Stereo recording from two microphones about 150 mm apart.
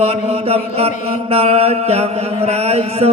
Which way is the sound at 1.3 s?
40° right (ahead or behind).